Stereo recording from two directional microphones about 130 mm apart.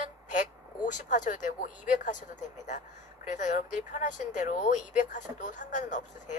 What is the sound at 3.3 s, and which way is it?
Speech, 70° left (ahead or behind).